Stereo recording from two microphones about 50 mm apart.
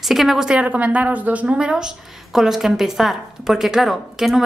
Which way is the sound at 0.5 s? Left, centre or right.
Right.